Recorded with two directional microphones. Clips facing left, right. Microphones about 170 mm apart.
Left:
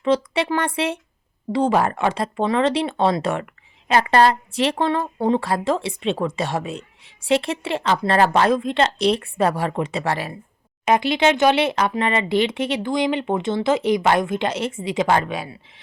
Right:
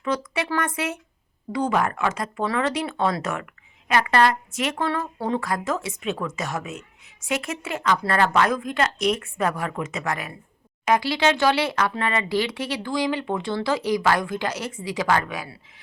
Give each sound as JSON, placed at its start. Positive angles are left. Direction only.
{"t": 0.0, "sound": "a woman's voice", "side_deg": 25}
{"t": 10.8, "sound": "speech", "side_deg": 20}